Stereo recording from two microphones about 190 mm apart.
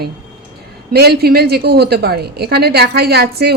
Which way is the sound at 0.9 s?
55° right (ahead or behind).